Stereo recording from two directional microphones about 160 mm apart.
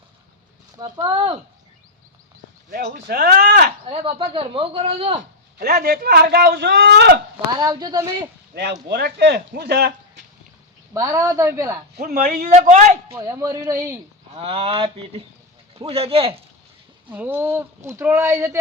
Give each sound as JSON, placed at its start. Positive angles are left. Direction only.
{"t": 0.8, "sound": "a woman's voice", "side_deg": -25}
{"t": 2.6, "sound": "speech", "side_deg": -65}
{"t": 3.8, "sound": "speech", "side_deg": -30}
{"t": 5.5, "sound": "speech", "side_deg": -75}
{"t": 7.6, "sound": "a woman's voice", "side_deg": -25}
{"t": 8.9, "sound": "speech", "side_deg": -75}
{"t": 10.9, "sound": "a woman's voice", "side_deg": -20}
{"t": 11.9, "sound": "speech", "side_deg": -70}
{"t": 12.5, "sound": "a man's voice", "side_deg": -50}
{"t": 13.1, "sound": "speech", "side_deg": -15}
{"t": 14.3, "sound": "speech", "side_deg": -35}
{"t": 17.1, "sound": "speech", "side_deg": -10}